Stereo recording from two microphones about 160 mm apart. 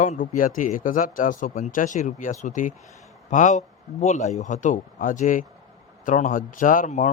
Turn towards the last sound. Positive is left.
turn(degrees=50)  # may be behind; listen again after turning